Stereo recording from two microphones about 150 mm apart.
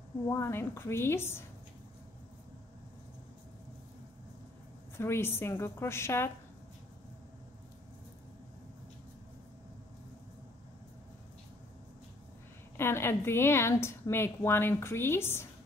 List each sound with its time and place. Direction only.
0.3 s a woman's voice: 15° left (ahead or behind)
4.9 s a woman's voice: 15° left (ahead or behind)
12.7 s a woman's voice: 15° left (ahead or behind)